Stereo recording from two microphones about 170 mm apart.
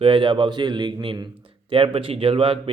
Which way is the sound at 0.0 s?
30° right (ahead or behind).